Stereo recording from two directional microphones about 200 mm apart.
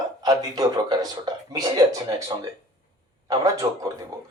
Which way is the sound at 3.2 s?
15° right (ahead or behind).